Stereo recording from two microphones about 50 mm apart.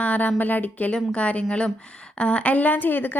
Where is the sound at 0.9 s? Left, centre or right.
Left.